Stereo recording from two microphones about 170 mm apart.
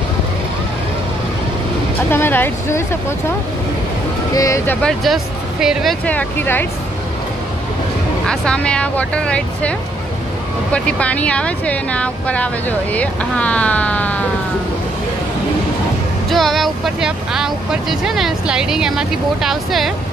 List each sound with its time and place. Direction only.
2.0 s speech: 10° left (ahead or behind)
4.3 s speech: 20° left (ahead or behind)
4.8 s speech: centre (ahead or behind)
8.3 s speech: 5° left (ahead or behind)
16.3 s speech: centre (ahead or behind)